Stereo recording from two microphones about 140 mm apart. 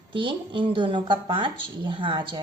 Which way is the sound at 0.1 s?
35° right (ahead or behind).